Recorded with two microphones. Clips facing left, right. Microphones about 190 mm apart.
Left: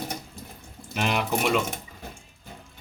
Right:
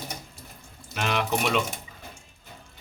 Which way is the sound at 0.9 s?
15° left (ahead or behind).